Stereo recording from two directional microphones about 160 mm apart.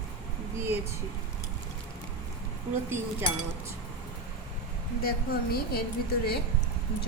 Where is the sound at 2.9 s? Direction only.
15° right (ahead or behind).